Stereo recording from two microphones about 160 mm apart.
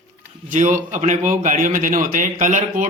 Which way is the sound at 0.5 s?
55° right (ahead or behind).